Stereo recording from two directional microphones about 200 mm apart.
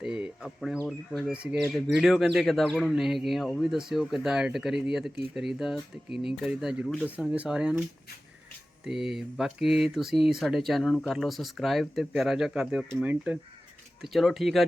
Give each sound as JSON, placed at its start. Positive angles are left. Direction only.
{"t": 0.0, "sound": "speech", "side_deg": -5}